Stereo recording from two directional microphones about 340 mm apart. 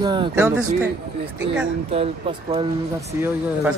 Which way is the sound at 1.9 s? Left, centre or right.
Centre.